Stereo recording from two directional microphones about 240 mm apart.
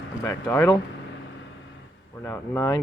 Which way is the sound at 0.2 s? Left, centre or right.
Centre.